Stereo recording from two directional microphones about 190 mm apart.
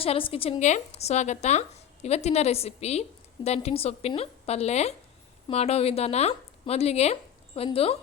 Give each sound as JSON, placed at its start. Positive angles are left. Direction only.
{"t": 0.0, "sound": "a woman's voice", "side_deg": 30}